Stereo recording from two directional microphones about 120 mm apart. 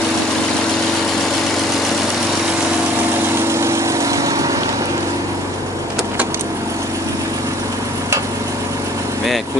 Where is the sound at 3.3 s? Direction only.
25° right (ahead or behind).